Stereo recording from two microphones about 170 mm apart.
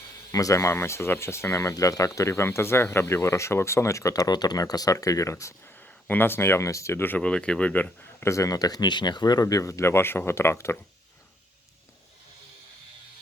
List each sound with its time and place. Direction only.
0.3 s speech: 20° left (ahead or behind)